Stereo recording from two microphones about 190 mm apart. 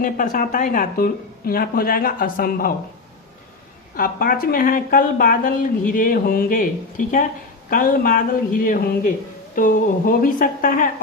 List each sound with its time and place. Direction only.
0.0 s a woman's voice: 45° left (ahead or behind)
3.9 s a woman's voice: 50° left (ahead or behind)